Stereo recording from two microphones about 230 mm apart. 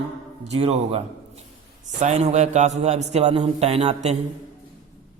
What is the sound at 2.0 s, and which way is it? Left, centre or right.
A man's voice, right.